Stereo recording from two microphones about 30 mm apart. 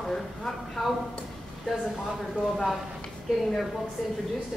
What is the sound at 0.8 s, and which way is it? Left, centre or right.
Speech, centre.